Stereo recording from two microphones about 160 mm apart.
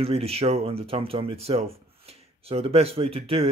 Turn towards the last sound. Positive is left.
turn(degrees=-35)  # may be behind; listen again after turning